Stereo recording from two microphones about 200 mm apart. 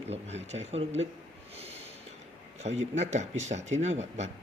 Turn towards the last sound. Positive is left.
turn(degrees=-35)  # may be behind; listen again after turning